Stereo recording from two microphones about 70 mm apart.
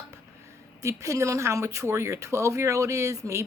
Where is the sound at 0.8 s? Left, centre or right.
Right.